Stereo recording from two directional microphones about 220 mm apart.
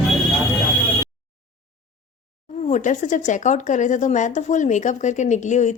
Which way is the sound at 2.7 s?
35° left (ahead or behind).